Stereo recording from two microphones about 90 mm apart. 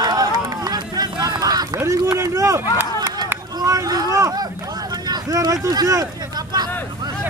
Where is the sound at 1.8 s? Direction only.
35° right (ahead or behind).